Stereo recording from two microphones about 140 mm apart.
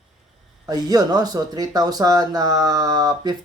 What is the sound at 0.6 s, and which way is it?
Speech, 25° right (ahead or behind).